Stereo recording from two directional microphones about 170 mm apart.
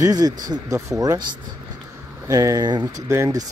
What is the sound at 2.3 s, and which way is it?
Speech, 20° right (ahead or behind).